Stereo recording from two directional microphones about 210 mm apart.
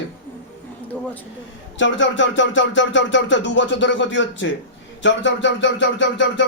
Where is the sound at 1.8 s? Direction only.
60° left (ahead or behind).